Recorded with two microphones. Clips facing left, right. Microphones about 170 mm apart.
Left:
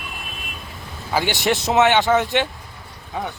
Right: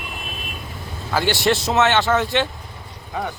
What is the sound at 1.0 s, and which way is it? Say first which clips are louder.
Speech: right 1 dB; 15° left (ahead or behind).